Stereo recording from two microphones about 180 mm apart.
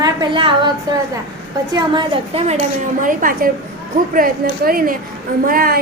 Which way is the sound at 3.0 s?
50° right (ahead or behind).